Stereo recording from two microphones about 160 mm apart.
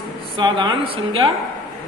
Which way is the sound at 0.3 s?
30° right (ahead or behind).